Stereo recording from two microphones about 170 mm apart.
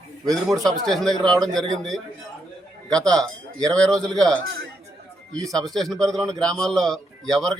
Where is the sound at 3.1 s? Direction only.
5° left (ahead or behind).